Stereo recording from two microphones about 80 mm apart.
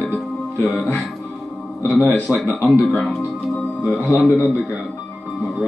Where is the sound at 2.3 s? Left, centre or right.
Centre.